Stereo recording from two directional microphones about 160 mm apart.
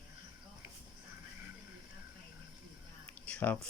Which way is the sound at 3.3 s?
10° left (ahead or behind).